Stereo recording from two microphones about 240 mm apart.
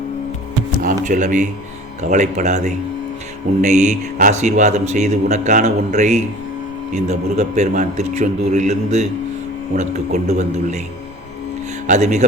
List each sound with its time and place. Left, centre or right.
1.0 s a man's voice: right
11.9 s a man's voice: right